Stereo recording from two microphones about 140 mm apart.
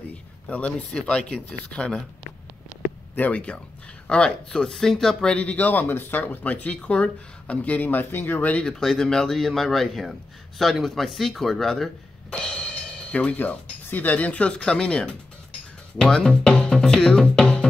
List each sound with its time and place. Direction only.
0.5 s speech: 10° left (ahead or behind)
3.2 s speech: 10° left (ahead or behind)